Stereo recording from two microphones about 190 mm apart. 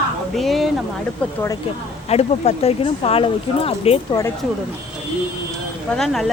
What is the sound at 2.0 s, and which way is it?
Speech, 35° left (ahead or behind).